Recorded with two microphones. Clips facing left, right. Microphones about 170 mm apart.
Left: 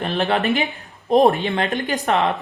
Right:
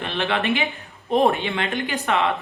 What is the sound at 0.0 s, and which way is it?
Speech, 40° left (ahead or behind).